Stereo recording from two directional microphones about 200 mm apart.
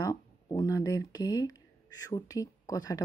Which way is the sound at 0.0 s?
15° left (ahead or behind).